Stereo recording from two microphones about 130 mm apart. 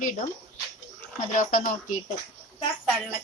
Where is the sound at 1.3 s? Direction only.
90° left.